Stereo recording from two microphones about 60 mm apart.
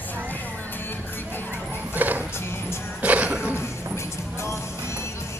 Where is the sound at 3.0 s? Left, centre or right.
Right.